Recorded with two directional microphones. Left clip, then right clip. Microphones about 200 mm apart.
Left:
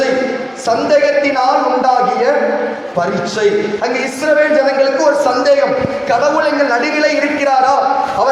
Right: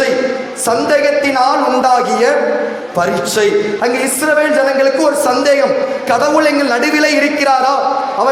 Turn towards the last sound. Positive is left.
turn(degrees=-40)  # may be behind; listen again after turning